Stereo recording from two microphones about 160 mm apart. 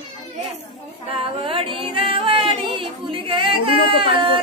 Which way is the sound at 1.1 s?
35° right (ahead or behind).